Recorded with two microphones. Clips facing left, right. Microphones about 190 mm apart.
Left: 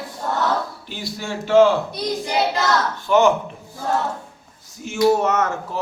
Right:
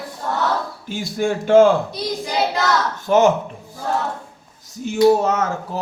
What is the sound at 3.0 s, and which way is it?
Speech, 45° right (ahead or behind).